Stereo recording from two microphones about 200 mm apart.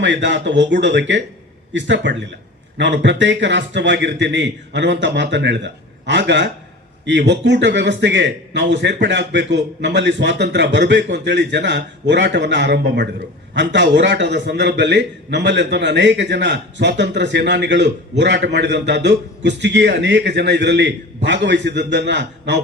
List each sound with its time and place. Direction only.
0.0 s a man's voice: 65° right (ahead or behind)